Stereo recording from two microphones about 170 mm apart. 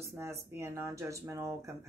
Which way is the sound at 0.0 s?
15° right (ahead or behind).